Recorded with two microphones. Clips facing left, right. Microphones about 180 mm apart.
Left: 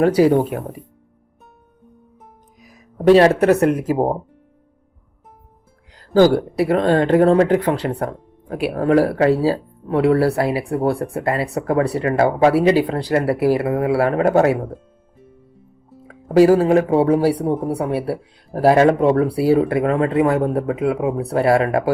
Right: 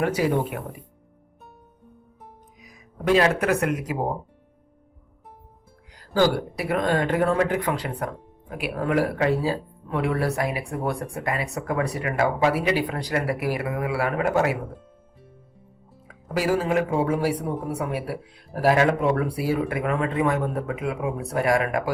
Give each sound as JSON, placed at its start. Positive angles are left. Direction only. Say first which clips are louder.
{"t": 0.0, "sound": "speech", "louder": "left 9 dB", "side_deg": 40}
{"t": 2.6, "sound": "speech", "louder": "left 10 dB", "side_deg": 40}
{"t": 6.1, "sound": "speech", "louder": "left 8 dB", "side_deg": 45}
{"t": 6.6, "sound": "speech", "louder": "left 7 dB", "side_deg": 35}
{"t": 16.0, "sound": "speech", "louder": "left 12 dB", "side_deg": 40}